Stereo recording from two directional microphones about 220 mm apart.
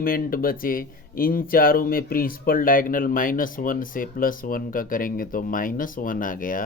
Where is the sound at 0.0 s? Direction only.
40° left (ahead or behind).